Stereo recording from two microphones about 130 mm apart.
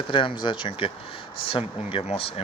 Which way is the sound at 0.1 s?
40° left (ahead or behind).